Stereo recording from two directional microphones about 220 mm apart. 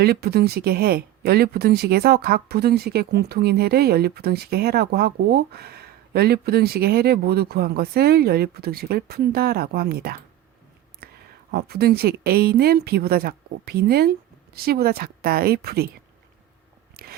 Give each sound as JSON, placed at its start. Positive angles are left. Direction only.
{"t": 0.0, "sound": "speech", "side_deg": -45}
{"t": 11.0, "sound": "a sound", "side_deg": -45}
{"t": 11.5, "sound": "speech", "side_deg": -45}
{"t": 17.0, "sound": "biting", "side_deg": -45}